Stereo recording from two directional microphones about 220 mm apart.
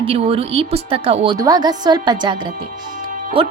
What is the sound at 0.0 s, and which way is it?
A woman's voice, 25° right (ahead or behind).